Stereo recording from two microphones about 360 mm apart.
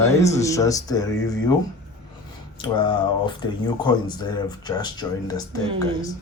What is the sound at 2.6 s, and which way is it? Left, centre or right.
Speech, centre.